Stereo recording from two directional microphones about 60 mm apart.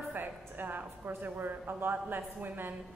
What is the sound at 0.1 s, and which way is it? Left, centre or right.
A woman's voice, right.